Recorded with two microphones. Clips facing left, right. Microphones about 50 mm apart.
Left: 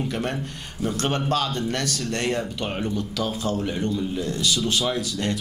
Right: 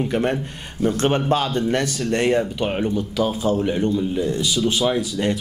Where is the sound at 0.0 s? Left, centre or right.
Centre.